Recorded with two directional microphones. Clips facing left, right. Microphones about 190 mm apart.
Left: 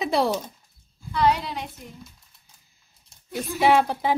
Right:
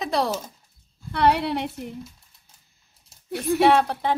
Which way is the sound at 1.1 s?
65° right (ahead or behind).